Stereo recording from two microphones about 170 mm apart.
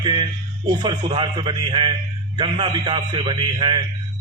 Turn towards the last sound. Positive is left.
turn(degrees=-30)  # may be behind; listen again after turning